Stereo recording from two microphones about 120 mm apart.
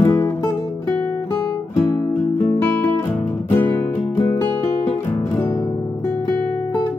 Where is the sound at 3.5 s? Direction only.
20° left (ahead or behind).